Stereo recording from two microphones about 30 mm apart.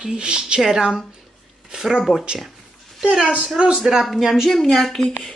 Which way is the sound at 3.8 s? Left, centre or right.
Centre.